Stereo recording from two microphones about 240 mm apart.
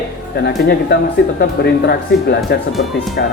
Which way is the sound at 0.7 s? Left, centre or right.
Left.